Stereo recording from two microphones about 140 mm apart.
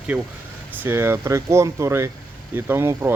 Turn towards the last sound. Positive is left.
turn(degrees=-15)  # may be behind; listen again after turning